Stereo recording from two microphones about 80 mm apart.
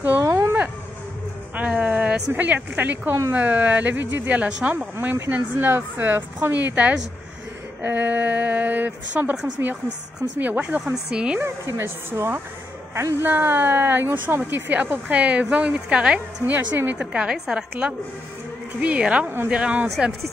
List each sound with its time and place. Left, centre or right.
0.2 s a sound: right
1.5 s speech: centre
5.1 s speech: right
11.4 s speech: right